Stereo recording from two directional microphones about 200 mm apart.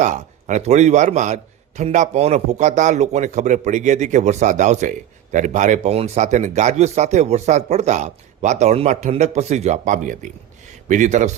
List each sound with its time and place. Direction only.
0.0 s a man's voice: 35° right (ahead or behind)